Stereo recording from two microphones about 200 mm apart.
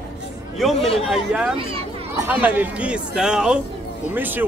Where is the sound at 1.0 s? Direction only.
Centre (ahead or behind).